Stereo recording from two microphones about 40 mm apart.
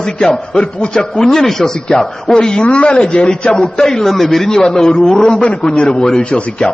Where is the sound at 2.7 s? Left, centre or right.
Left.